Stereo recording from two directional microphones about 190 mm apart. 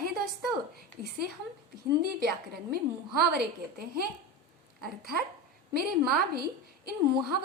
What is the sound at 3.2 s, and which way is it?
A woman's voice, 55° right (ahead or behind).